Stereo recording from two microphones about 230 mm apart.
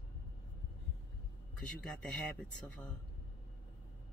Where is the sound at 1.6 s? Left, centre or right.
Centre.